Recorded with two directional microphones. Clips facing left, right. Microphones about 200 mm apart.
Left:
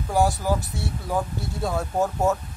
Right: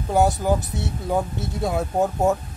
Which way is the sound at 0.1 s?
20° right (ahead or behind).